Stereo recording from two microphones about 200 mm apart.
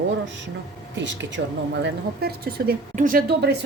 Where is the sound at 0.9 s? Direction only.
65° right (ahead or behind).